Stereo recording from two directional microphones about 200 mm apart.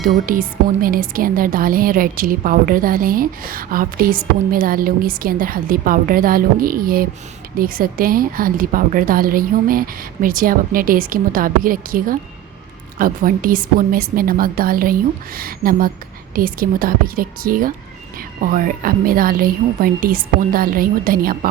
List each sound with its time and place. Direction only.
0.0 s speech: 45° right (ahead or behind)